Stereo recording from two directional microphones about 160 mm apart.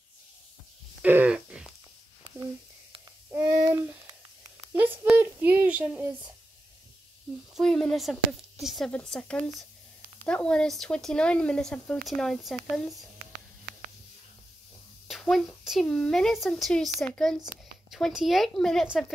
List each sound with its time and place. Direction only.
1.0 s a sound: 10° right (ahead or behind)
3.3 s a sound: 15° right (ahead or behind)
5.1 s child singing: 10° right (ahead or behind)
7.5 s speech: 5° left (ahead or behind)
13.2 s whispering: 65° right (ahead or behind)
15.0 s speech: centre (ahead or behind)